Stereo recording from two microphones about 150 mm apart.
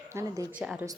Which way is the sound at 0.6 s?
5° right (ahead or behind).